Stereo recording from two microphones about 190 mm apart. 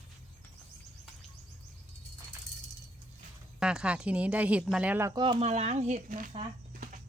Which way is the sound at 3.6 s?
5° right (ahead or behind).